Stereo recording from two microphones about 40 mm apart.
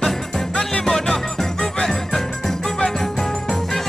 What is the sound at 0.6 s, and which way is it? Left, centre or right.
Music, centre.